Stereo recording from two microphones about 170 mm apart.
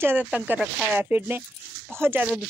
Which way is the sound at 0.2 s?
Centre (ahead or behind).